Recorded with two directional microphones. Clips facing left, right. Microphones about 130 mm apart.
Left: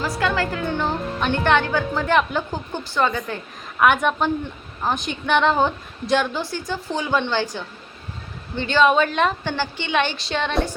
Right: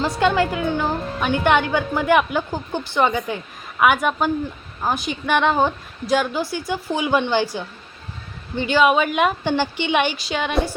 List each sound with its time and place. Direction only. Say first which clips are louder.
0.2 s a woman's voice: right 5 dB; 20° right (ahead or behind)
0.8 s a woman's voice: right 1 dB; 5° right (ahead or behind)